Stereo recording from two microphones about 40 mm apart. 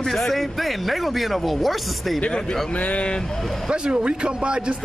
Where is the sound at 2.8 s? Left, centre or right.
Left.